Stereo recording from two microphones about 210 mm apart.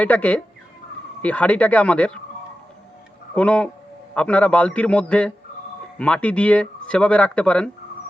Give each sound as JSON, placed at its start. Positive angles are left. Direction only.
{"t": 0.0, "sound": "speech", "side_deg": 5}
{"t": 3.3, "sound": "speech", "side_deg": 5}